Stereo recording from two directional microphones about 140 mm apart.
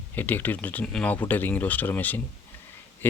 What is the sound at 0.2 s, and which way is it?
Speech, 15° left (ahead or behind).